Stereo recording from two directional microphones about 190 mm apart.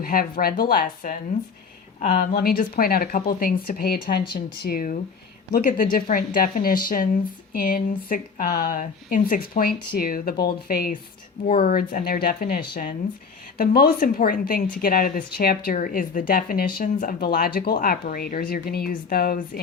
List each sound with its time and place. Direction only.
0.0 s a woman's voice: 50° left (ahead or behind)